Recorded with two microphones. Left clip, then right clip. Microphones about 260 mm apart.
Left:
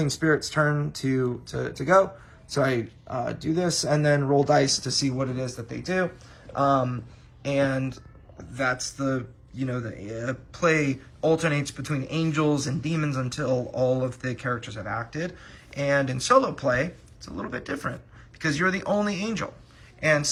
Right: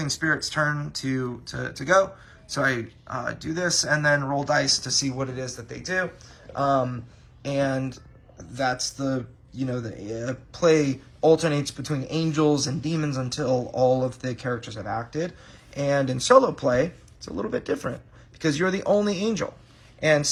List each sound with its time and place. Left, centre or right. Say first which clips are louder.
0.0 s speech: left 1 dB; centre